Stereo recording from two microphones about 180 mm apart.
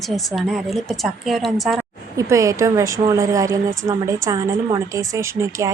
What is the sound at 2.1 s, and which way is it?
A woman's voice, 20° right (ahead or behind).